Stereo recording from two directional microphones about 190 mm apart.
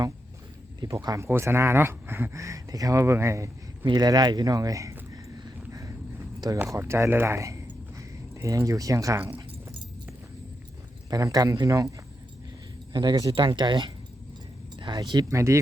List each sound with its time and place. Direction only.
0.8 s speech: 20° right (ahead or behind)
6.6 s speech: 10° right (ahead or behind)
11.1 s speech: 20° right (ahead or behind)